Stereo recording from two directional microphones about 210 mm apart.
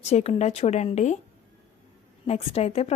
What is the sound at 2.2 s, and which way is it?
Speech, 30° left (ahead or behind).